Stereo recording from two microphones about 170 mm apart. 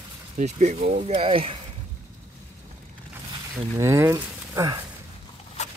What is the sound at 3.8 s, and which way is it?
Speech, 15° right (ahead or behind).